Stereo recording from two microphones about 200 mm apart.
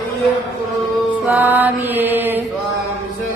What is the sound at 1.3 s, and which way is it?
Chant, 10° right (ahead or behind).